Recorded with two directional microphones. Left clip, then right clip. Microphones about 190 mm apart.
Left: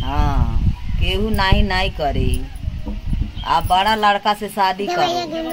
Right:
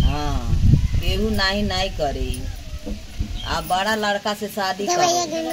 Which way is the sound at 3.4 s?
20° left (ahead or behind).